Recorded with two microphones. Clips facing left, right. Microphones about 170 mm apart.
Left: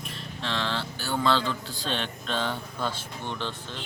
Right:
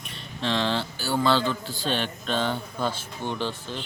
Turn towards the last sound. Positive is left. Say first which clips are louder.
# right 4 dB
turn(degrees=-5)  # may be behind; listen again after turning